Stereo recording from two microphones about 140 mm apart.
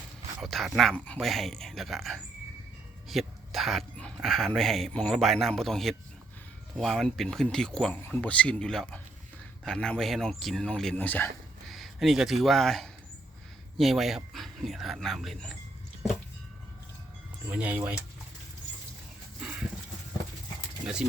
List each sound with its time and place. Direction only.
0.4 s speech: centre (ahead or behind)
11.7 s speech: centre (ahead or behind)
17.5 s speech: 10° right (ahead or behind)
19.4 s livestock: 10° right (ahead or behind)